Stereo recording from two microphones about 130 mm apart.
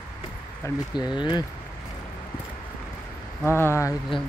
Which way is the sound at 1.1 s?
35° left (ahead or behind).